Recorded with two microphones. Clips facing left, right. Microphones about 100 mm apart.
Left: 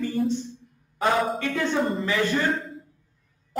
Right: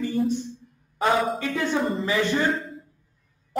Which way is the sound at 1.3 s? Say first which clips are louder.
Even; 10° right (ahead or behind).